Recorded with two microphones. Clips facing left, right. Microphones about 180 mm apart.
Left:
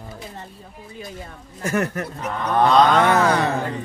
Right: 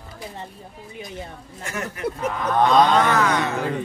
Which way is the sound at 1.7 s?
55° left (ahead or behind).